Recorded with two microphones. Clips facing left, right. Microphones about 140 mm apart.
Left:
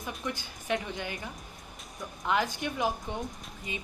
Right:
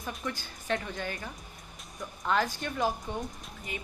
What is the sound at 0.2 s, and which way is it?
A woman's voice, 15° left (ahead or behind).